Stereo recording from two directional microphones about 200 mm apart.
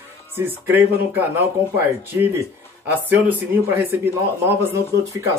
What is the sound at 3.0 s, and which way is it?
Speech, 10° right (ahead or behind).